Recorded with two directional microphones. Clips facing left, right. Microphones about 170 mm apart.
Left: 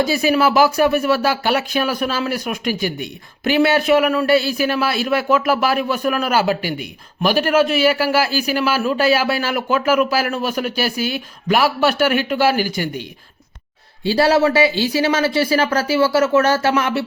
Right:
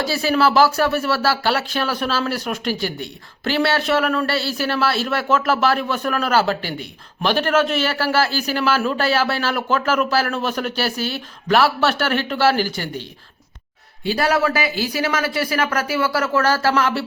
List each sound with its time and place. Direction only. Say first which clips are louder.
0.0 s speech: left 2 dB; 15° left (ahead or behind)
14.0 s a man's voice: left 4 dB; 30° left (ahead or behind)